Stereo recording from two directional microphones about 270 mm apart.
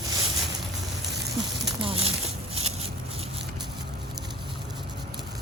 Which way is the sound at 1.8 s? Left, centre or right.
Right.